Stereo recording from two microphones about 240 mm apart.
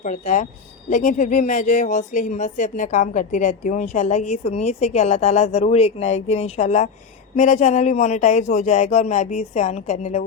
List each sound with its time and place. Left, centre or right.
0.0 s speech: left